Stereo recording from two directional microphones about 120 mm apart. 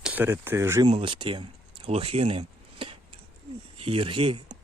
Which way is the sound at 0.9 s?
45° right (ahead or behind).